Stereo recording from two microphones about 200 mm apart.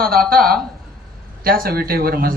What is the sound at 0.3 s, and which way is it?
A man's voice, 50° right (ahead or behind).